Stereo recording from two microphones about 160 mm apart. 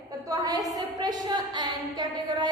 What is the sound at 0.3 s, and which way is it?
A woman's voice, 25° right (ahead or behind).